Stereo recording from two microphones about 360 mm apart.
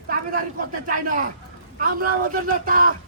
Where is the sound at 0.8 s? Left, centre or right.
Right.